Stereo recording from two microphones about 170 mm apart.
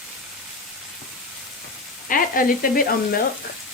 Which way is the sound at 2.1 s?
55° left (ahead or behind).